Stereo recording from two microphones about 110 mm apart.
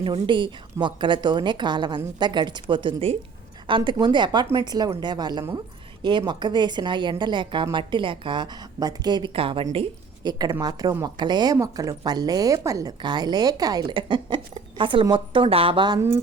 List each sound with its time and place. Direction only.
0.1 s a woman's voice: 45° right (ahead or behind)
9.3 s a woman's voice: 55° right (ahead or behind)
10.2 s a woman's voice: 40° right (ahead or behind)
11.5 s a woman's voice: 30° right (ahead or behind); by 16.0 s 50° right (ahead or behind)
16.0 s a woman's voice: 25° right (ahead or behind)